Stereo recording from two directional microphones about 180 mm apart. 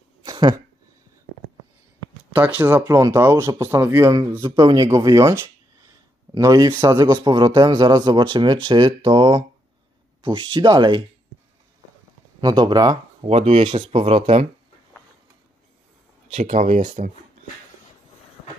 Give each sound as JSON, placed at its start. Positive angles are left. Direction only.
{"t": 0.2, "sound": "a sound", "side_deg": -25}
{"t": 2.3, "sound": "a man's voice", "side_deg": -10}
{"t": 12.4, "sound": "speech", "side_deg": -25}
{"t": 13.3, "sound": "speech", "side_deg": -35}
{"t": 16.3, "sound": "speech", "side_deg": -40}